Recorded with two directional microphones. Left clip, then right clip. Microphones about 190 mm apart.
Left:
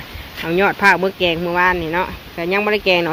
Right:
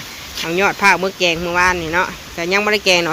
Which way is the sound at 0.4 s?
15° left (ahead or behind).